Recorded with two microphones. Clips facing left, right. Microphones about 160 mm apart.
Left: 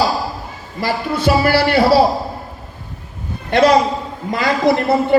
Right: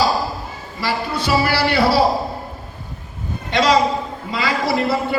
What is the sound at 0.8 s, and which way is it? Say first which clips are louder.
Speech: left 3 dB; 45° left (ahead or behind).